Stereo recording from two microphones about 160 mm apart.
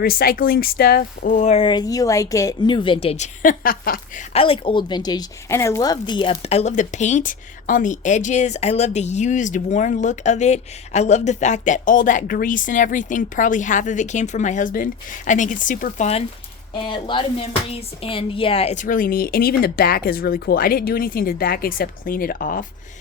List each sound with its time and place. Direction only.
0.0 s speech: 70° left (ahead or behind); by 3.2 s 35° left (ahead or behind)
3.4 s speech: 60° left (ahead or behind)
4.3 s a woman's voice: 35° left (ahead or behind)
16.9 s speech: 30° left (ahead or behind); by 22.6 s 65° left (ahead or behind)